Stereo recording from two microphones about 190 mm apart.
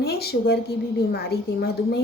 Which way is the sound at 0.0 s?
55° left (ahead or behind).